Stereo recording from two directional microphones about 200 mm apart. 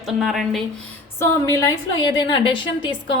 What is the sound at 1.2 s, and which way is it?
A woman's voice, 15° left (ahead or behind).